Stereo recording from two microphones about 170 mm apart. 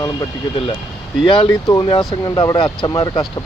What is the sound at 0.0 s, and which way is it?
Speech, 25° left (ahead or behind).